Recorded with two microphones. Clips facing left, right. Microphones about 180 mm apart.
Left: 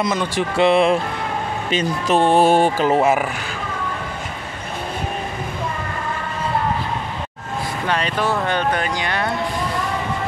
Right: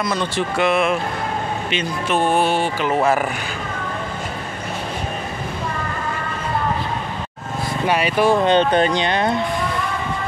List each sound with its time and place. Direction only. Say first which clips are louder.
0.6 s speech: left 4 dB; 30° left (ahead or behind)
2.4 s speech: left 5 dB; 45° left (ahead or behind)
3.0 s speech: right 3 dB; 5° left (ahead or behind)
7.8 s speech: right 5 dB; 10° right (ahead or behind)